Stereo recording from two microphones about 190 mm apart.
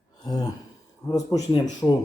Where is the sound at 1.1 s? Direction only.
20° left (ahead or behind).